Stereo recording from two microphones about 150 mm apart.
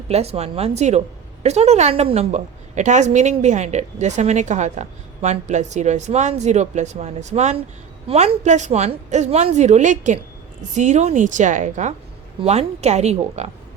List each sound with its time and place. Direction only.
0.1 s a woman's voice: 45° right (ahead or behind)